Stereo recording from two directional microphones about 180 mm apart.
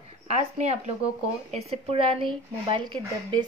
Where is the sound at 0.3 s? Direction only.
40° right (ahead or behind).